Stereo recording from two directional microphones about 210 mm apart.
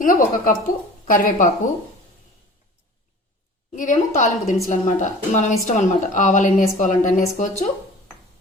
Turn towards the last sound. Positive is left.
turn(degrees=35)  # may be behind; listen again after turning